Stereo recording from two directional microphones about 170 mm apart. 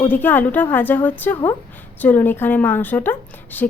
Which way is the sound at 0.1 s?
10° left (ahead or behind).